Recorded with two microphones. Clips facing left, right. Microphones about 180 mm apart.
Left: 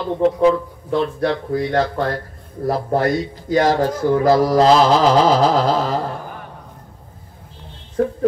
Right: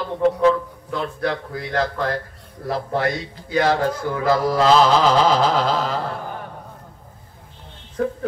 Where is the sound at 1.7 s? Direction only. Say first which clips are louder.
Even; 30° left (ahead or behind).